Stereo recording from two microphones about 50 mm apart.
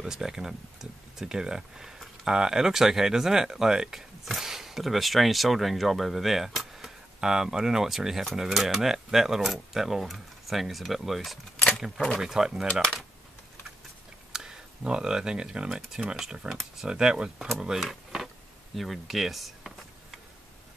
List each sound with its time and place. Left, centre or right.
0.0 s speech: centre
14.3 s a sound: centre
14.8 s speech: centre